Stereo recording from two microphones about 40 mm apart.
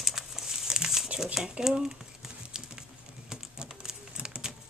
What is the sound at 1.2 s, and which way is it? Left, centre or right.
Speech, centre.